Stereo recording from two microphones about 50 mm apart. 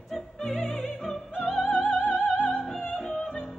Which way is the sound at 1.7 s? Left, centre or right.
Centre.